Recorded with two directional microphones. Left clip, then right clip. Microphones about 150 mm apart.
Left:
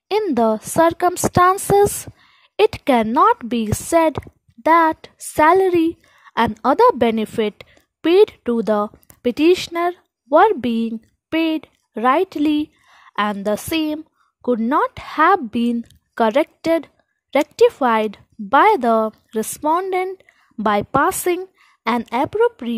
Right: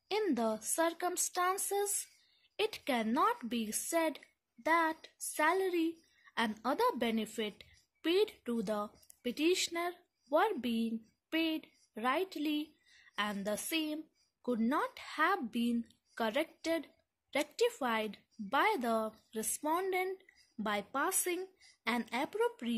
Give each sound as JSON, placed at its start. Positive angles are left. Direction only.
{"t": 0.3, "sound": "a woman's voice", "side_deg": 55}